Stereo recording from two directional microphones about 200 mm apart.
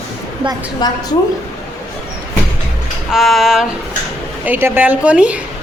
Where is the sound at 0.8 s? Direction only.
20° left (ahead or behind).